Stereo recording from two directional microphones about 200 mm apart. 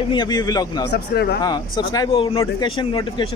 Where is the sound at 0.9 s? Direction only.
55° left (ahead or behind).